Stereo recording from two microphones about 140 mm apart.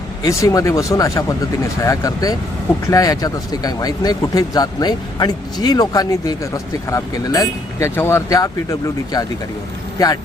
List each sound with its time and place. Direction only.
0.2 s speech: 25° left (ahead or behind)